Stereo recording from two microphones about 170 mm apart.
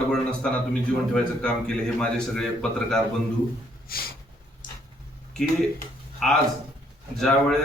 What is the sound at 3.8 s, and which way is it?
Snort, 60° left (ahead or behind).